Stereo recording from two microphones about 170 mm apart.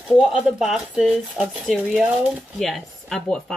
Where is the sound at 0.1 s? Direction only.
Centre (ahead or behind).